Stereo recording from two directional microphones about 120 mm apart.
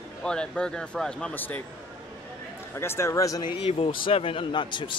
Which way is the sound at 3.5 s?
50° left (ahead or behind).